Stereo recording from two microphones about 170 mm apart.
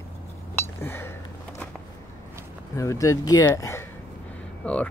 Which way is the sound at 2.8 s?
20° left (ahead or behind).